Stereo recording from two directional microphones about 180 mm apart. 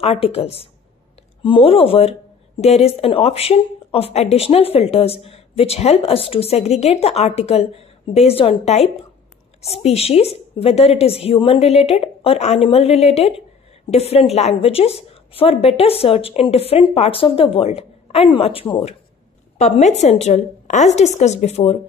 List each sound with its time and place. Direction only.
0.0 s speech: 35° left (ahead or behind)